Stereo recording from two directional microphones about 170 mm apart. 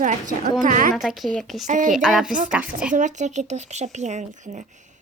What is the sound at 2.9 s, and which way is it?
A woman's voice, 45° right (ahead or behind).